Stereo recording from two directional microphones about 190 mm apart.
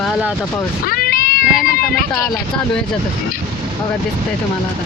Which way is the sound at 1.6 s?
50° left (ahead or behind).